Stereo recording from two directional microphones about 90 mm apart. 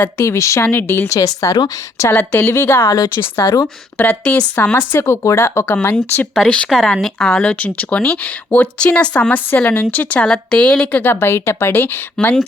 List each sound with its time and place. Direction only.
0.2 s a woman's voice: 35° left (ahead or behind)
0.7 s a woman's voice: 25° left (ahead or behind); by 2.0 s 40° left (ahead or behind)
2.0 s a woman's voice: 25° left (ahead or behind)
3.9 s speech: 20° left (ahead or behind)
6.8 s speech: 5° left (ahead or behind); by 11.9 s 25° left (ahead or behind)
12.2 s speech: 10° left (ahead or behind)